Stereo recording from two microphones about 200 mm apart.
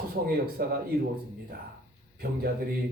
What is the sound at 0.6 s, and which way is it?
Speech, 50° right (ahead or behind).